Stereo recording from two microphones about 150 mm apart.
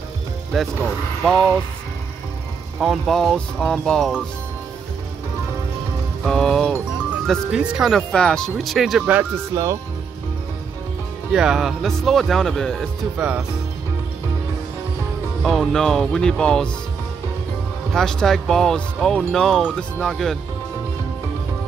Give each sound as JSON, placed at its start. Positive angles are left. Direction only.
{"t": 1.2, "sound": "speech", "side_deg": 5}
{"t": 2.8, "sound": "speech", "side_deg": 0}
{"t": 6.2, "sound": "speech", "side_deg": 5}
{"t": 9.5, "sound": "speech", "side_deg": -25}
{"t": 11.3, "sound": "speech", "side_deg": -5}
{"t": 13.2, "sound": "speech", "side_deg": -10}
{"t": 15.4, "sound": "speech", "side_deg": 5}
{"t": 17.9, "sound": "speech", "side_deg": 0}